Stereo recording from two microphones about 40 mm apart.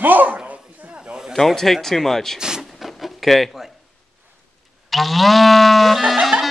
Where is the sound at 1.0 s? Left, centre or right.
Right.